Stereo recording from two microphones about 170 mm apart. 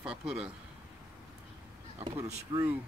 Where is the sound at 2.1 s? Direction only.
15° right (ahead or behind).